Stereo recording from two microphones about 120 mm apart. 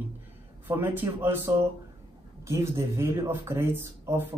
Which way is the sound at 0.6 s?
20° right (ahead or behind).